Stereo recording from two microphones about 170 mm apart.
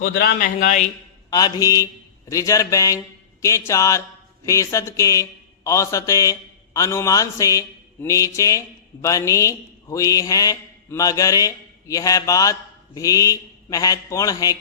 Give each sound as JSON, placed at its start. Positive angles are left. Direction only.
{"t": 0.0, "sound": "a man's voice", "side_deg": 65}
{"t": 1.3, "sound": "mantra", "side_deg": 20}